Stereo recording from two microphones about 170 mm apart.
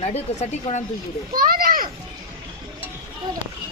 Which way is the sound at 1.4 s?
60° right (ahead or behind).